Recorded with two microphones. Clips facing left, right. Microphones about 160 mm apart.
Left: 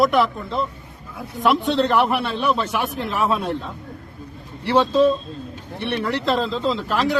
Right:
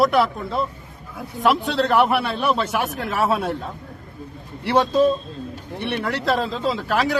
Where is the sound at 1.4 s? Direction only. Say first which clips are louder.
Left 1 dB; 5° right (ahead or behind).